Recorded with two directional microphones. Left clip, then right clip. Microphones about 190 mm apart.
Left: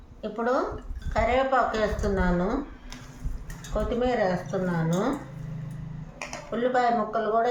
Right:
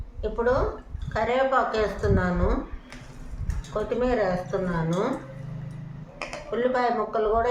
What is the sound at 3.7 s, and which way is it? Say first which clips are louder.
Speech: right 1 dB; 30° right (ahead or behind).